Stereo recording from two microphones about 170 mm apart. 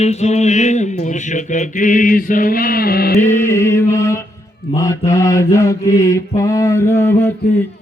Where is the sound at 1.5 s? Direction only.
50° left (ahead or behind).